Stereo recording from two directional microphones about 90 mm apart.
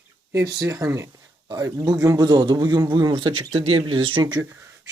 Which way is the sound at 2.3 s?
55° right (ahead or behind).